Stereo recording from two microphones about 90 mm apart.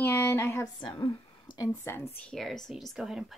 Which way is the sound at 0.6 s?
50° left (ahead or behind).